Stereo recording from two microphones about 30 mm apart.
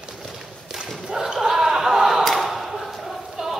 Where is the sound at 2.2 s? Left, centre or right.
Centre.